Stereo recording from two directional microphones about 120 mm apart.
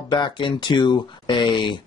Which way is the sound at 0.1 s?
40° left (ahead or behind).